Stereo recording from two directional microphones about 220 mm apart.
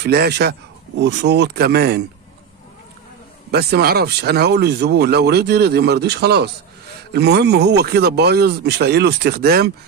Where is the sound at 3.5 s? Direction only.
45° right (ahead or behind).